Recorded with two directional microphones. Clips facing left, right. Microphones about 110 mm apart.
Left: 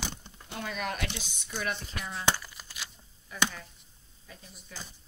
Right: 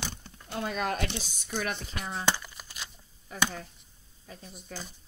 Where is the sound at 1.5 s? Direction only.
55° right (ahead or behind).